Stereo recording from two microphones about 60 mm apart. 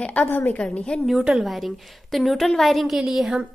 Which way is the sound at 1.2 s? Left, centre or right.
Centre.